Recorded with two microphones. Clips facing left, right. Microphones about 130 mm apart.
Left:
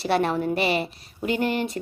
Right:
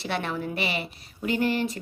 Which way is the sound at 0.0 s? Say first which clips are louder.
Left 7 dB; 35° left (ahead or behind).